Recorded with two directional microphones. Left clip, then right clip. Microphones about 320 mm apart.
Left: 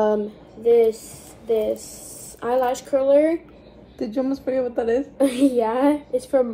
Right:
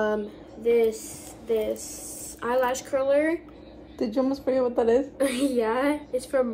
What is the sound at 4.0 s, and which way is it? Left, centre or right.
A woman's voice, right.